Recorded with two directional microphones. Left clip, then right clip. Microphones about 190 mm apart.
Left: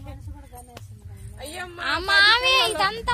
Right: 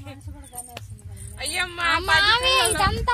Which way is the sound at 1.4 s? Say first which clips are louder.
Right 8 dB; 35° left (ahead or behind).